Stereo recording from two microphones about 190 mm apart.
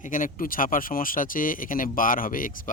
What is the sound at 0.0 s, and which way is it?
Speech, 45° left (ahead or behind).